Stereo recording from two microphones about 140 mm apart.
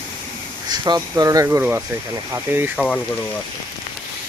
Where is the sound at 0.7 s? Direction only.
30° right (ahead or behind).